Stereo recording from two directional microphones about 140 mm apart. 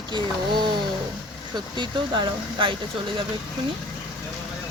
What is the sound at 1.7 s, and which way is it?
Speech, 35° right (ahead or behind).